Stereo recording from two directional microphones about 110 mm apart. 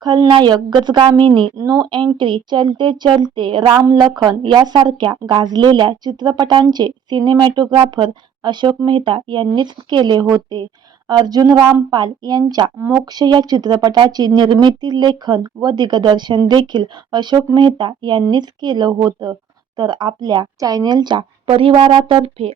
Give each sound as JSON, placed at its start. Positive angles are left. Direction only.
{"t": 0.0, "sound": "speech", "side_deg": -40}
{"t": 1.5, "sound": "speech", "side_deg": -35}
{"t": 2.0, "sound": "speech", "side_deg": -50}
{"t": 3.8, "sound": "speech", "side_deg": -40}
{"t": 12.8, "sound": "speech", "side_deg": -25}
{"t": 13.1, "sound": "speech", "side_deg": -40}
{"t": 21.4, "sound": "speech", "side_deg": -55}